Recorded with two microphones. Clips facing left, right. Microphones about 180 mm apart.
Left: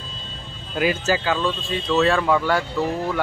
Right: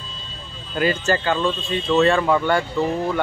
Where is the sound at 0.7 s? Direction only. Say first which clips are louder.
Right 1 dB; 5° left (ahead or behind).